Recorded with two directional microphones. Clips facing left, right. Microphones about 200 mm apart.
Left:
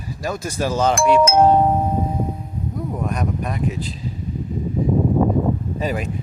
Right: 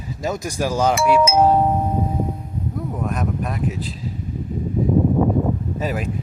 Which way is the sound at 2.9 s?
Centre (ahead or behind).